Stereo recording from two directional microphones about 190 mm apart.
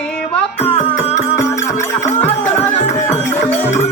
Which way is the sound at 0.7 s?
35° left (ahead or behind).